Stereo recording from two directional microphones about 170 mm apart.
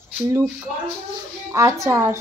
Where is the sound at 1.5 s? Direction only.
15° right (ahead or behind).